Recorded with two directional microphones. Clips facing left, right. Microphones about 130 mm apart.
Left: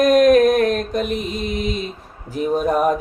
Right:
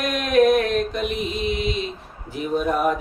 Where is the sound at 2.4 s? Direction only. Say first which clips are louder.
Left 4 dB; 40° left (ahead or behind).